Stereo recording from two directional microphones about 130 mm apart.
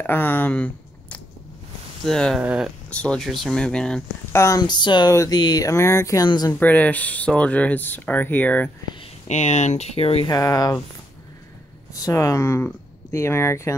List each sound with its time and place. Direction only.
0.0 s speech: 15° left (ahead or behind); by 2.7 s 5° right (ahead or behind)
2.9 s speech: 5° left (ahead or behind)
4.3 s speech: 20° left (ahead or behind)
6.6 s speech: 10° left (ahead or behind)
9.3 s speech: 65° left (ahead or behind)
10.2 s speech: 30° left (ahead or behind)
11.9 s speech: 25° left (ahead or behind)